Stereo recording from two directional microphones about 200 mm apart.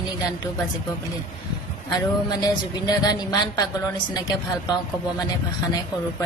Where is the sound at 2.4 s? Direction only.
20° left (ahead or behind).